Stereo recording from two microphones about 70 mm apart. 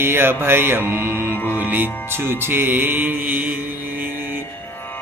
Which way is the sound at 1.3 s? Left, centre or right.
Left.